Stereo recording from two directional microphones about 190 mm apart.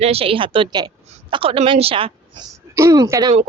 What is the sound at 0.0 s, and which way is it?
A woman's voice, 30° right (ahead or behind).